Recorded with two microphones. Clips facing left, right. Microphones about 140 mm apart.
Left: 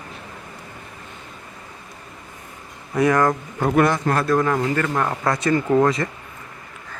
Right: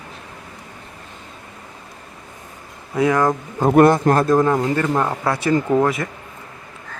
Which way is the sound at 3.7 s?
45° right (ahead or behind).